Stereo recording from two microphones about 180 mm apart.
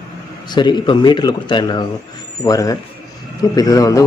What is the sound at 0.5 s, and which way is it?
A man's voice, 25° left (ahead or behind).